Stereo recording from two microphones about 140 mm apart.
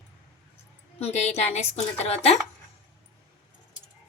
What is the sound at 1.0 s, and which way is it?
Speech, 50° left (ahead or behind).